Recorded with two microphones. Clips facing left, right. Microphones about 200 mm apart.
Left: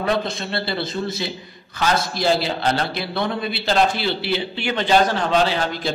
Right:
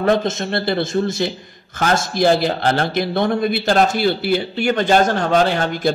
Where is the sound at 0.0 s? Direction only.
45° right (ahead or behind).